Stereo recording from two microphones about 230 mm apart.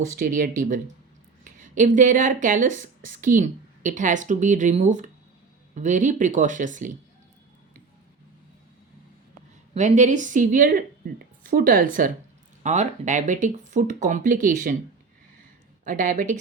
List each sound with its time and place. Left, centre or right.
0.2 s speech: right
9.7 s speech: right
15.8 s speech: right